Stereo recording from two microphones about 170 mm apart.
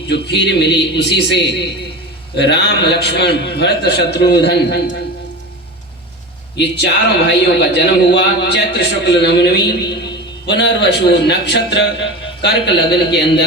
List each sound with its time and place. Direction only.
0.1 s a man's voice: 80° left
6.6 s a man's voice: 85° left
10.5 s a man's voice: 90° left